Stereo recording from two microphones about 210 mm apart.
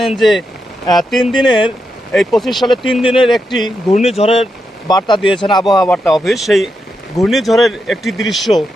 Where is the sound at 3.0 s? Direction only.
25° left (ahead or behind).